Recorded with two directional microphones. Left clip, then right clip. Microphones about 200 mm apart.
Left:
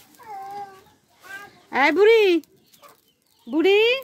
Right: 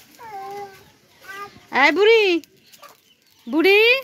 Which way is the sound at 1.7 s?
10° left (ahead or behind).